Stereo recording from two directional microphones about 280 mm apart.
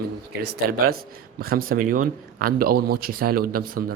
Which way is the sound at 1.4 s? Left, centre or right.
Right.